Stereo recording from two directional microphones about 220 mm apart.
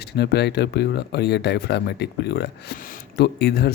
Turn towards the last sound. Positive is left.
turn(degrees=45)  # may be behind; listen again after turning